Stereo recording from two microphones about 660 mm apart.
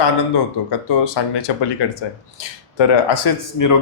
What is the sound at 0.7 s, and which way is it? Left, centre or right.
Speech, left.